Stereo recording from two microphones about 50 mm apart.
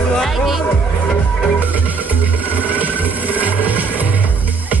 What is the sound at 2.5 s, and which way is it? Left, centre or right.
Music, right.